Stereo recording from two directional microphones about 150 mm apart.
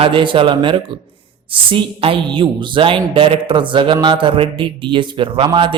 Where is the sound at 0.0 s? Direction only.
35° right (ahead or behind).